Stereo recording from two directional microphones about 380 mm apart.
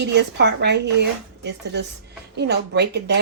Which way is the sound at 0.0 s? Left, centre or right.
Right.